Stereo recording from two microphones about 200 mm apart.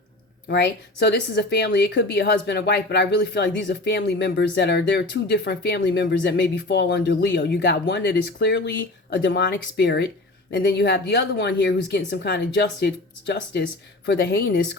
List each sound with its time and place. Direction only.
0.4 s speech: 55° left (ahead or behind)